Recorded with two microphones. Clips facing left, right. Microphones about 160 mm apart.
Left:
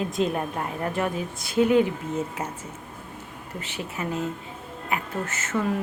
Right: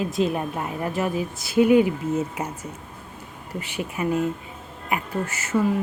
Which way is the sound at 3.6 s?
15° right (ahead or behind).